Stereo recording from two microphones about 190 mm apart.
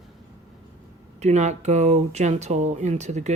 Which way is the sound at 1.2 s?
35° right (ahead or behind).